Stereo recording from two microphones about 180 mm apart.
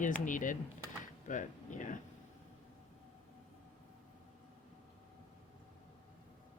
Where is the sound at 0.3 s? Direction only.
45° left (ahead or behind).